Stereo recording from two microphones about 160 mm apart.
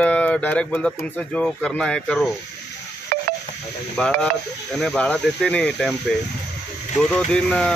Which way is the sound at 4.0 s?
5° left (ahead or behind).